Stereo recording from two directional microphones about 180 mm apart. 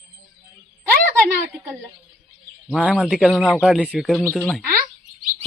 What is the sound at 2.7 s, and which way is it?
A woman's voice, 5° right (ahead or behind).